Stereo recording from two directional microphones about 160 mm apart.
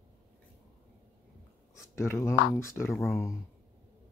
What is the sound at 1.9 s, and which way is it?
Speech, 15° left (ahead or behind).